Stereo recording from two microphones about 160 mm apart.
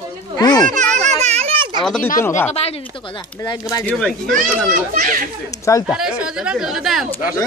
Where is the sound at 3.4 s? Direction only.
20° left (ahead or behind).